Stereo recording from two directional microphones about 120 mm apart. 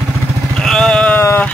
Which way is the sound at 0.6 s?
5° left (ahead or behind).